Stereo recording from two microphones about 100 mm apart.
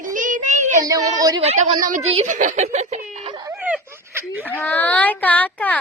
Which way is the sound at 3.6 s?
15° right (ahead or behind).